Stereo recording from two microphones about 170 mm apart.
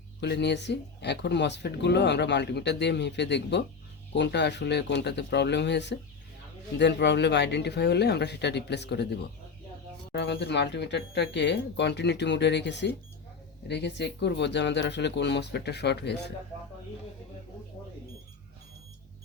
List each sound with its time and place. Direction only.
0.2 s speech: 80° left